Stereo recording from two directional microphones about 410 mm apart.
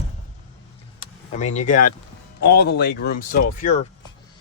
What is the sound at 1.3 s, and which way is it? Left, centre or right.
Speech, centre.